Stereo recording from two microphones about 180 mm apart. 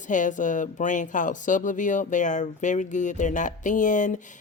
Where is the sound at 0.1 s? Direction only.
45° left (ahead or behind).